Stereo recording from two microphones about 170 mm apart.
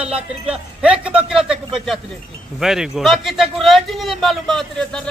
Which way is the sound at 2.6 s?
Centre (ahead or behind).